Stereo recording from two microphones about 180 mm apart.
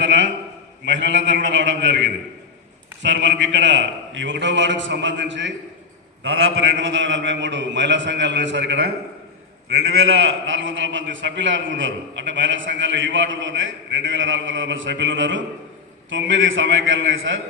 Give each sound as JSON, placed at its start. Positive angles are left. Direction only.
{"t": 0.0, "sound": "a sound", "side_deg": -90}
{"t": 0.9, "sound": "a man's voice", "side_deg": -85}
{"t": 10.1, "sound": "a man's voice", "side_deg": -90}